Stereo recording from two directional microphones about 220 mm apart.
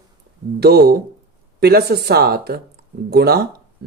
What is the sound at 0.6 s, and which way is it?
Speech, 45° right (ahead or behind).